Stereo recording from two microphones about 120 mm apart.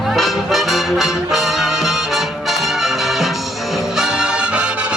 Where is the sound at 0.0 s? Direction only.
Centre (ahead or behind).